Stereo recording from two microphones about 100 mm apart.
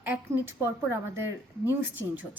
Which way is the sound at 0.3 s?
25° right (ahead or behind).